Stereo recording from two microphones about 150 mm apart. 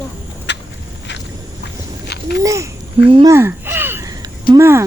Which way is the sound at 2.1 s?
90° left.